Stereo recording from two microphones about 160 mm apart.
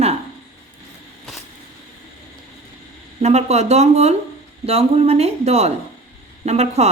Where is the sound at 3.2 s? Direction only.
45° right (ahead or behind).